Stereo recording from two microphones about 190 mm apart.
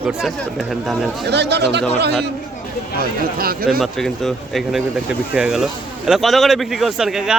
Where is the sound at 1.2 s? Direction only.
65° right (ahead or behind).